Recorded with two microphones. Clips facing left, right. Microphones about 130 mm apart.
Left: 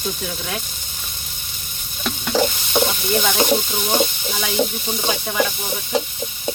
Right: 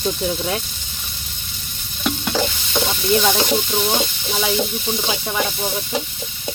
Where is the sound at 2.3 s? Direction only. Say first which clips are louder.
Left 3 dB; 10° left (ahead or behind).